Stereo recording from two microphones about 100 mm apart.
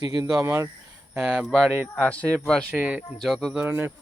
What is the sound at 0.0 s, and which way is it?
Speech, 40° right (ahead or behind).